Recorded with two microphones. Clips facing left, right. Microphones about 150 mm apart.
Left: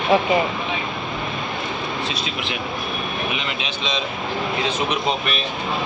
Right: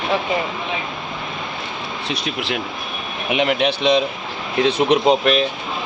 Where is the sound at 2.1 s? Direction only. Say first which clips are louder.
Right 3 dB; 65° right (ahead or behind); by 5.4 s 90° right.